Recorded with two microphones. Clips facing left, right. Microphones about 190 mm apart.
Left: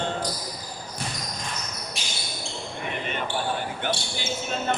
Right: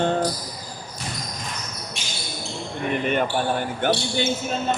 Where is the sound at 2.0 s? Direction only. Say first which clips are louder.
Right 1 dB; centre (ahead or behind).